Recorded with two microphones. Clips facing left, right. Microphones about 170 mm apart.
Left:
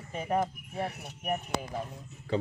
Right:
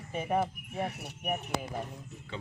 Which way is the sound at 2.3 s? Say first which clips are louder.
Left 12 dB; 40° left (ahead or behind).